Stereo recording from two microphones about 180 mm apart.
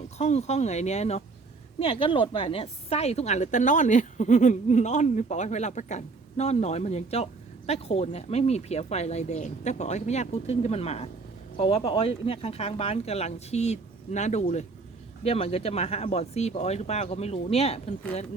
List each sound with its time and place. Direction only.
0.2 s a woman's voice: 35° left (ahead or behind)